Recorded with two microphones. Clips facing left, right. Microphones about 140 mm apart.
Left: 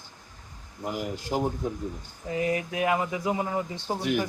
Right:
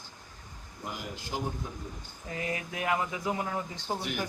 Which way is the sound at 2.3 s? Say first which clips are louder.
Left 8 dB; 20° left (ahead or behind).